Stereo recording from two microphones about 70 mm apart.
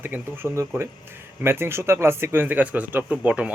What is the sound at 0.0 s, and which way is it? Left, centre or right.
Speech, right.